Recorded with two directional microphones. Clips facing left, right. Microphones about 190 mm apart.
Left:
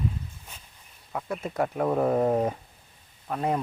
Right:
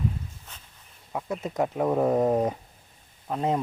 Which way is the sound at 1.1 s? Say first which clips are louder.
Right 1 dB; 20° right (ahead or behind).